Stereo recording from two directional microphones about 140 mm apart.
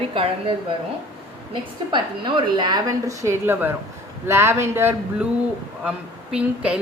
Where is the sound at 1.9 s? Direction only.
35° right (ahead or behind); by 5.2 s 15° right (ahead or behind).